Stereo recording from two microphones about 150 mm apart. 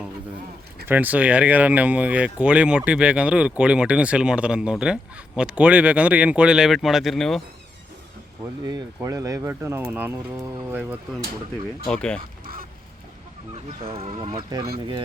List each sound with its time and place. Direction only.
0.9 s speech: 10° right (ahead or behind)
9.0 s speech: 20° right (ahead or behind)
11.9 s speech: 5° left (ahead or behind)
13.8 s speech: 40° right (ahead or behind)
14.2 s speech: 25° right (ahead or behind)